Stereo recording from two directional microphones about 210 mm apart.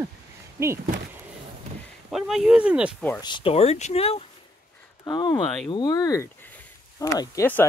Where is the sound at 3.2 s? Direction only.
20° left (ahead or behind).